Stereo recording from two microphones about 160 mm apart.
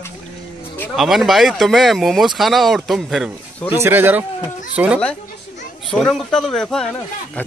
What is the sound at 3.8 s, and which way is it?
Speech, 15° right (ahead or behind).